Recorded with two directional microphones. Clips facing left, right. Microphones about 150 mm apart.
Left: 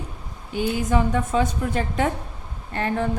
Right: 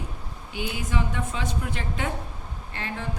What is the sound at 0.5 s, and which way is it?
A woman's voice, 45° left (ahead or behind).